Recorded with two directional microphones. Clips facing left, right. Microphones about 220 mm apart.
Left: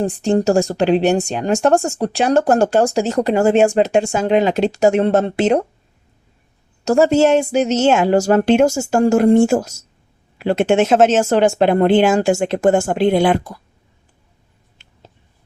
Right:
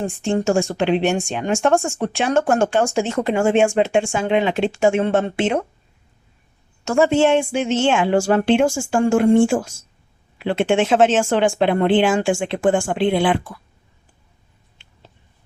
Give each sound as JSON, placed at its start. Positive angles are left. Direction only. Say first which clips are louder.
{"t": 0.0, "sound": "speech", "louder": "left 4 dB", "side_deg": 35}
{"t": 6.8, "sound": "speech", "louder": "left 3 dB", "side_deg": 40}
{"t": 14.8, "sound": "a sound", "louder": "left 2 dB", "side_deg": 40}